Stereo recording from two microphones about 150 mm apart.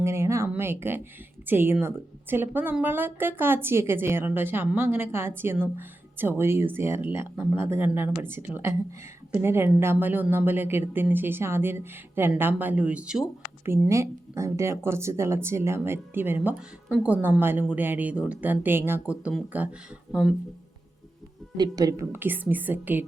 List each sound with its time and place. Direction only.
0.0 s speech: 20° right (ahead or behind)
13.7 s speech: 20° right (ahead or behind)
21.6 s speech: 25° right (ahead or behind)